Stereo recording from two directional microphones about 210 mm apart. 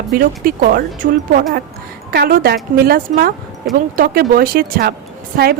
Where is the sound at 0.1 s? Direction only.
40° right (ahead or behind).